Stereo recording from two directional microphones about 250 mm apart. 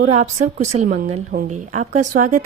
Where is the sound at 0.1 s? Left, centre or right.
Right.